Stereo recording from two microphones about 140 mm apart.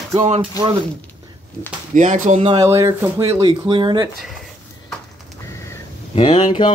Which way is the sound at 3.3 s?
35° right (ahead or behind).